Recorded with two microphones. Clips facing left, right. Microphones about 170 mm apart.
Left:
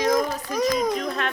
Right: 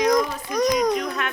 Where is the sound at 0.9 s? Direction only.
30° left (ahead or behind).